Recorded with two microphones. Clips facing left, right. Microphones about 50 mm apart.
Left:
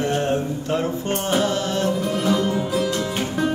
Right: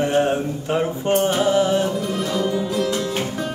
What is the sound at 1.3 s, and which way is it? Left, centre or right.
Music, centre.